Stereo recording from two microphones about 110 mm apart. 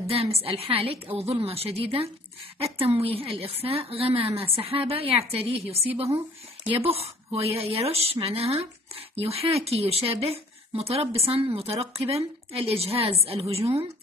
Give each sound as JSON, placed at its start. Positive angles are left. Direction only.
{"t": 0.1, "sound": "a woman's voice", "side_deg": -65}